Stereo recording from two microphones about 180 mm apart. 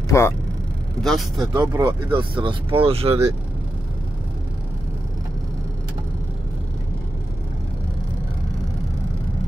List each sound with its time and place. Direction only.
0.1 s speech: 15° left (ahead or behind)
1.0 s speech: centre (ahead or behind)
1.5 s speech: 20° right (ahead or behind)